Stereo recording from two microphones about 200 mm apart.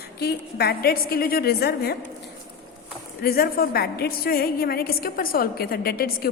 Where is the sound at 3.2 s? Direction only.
50° left (ahead or behind).